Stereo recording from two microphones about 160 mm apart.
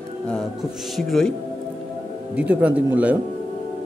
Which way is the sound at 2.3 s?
10° right (ahead or behind).